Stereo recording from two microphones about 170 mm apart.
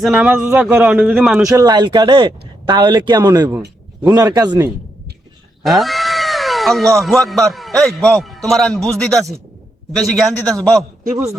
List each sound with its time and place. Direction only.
0.0 s a man's voice: 5° right (ahead or behind)
1.5 s speech: 25° right (ahead or behind)
5.6 s cat: centre (ahead or behind)
7.5 s a man's voice: centre (ahead or behind)